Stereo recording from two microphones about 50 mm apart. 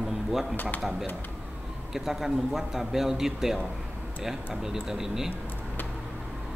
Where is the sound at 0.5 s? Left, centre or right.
Left.